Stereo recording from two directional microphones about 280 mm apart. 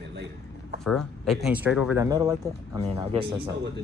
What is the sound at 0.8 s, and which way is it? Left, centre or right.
Speech, centre.